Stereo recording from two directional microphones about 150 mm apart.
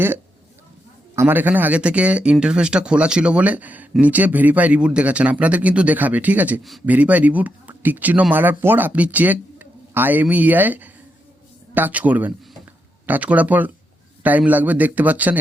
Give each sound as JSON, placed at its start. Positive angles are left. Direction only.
{"t": 1.1, "sound": "speech", "side_deg": -15}